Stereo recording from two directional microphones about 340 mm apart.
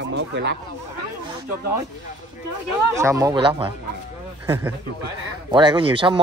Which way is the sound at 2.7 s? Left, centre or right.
Centre.